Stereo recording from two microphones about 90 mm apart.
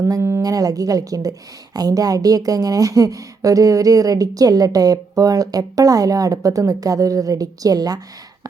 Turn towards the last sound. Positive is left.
turn(degrees=-45)  # may be behind; listen again after turning